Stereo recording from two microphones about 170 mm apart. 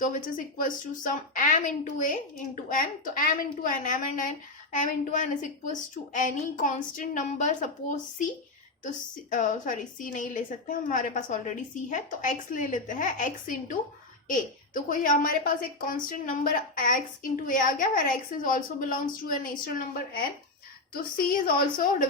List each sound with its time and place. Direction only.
0.0 s a woman's voice: 50° left (ahead or behind)